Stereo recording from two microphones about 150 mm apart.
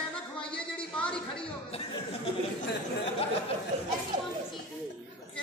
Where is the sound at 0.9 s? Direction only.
5° left (ahead or behind).